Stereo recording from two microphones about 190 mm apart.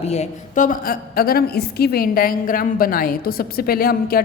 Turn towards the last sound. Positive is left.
turn(degrees=50)  # may be behind; listen again after turning